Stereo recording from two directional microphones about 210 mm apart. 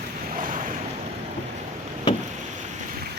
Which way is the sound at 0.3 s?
40° right (ahead or behind).